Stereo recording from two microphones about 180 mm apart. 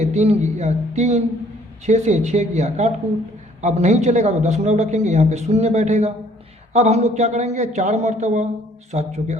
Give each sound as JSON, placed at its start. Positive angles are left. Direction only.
{"t": 0.0, "sound": "a man's voice", "side_deg": -35}